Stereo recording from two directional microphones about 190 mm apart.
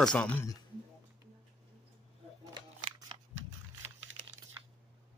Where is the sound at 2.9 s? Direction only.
30° right (ahead or behind).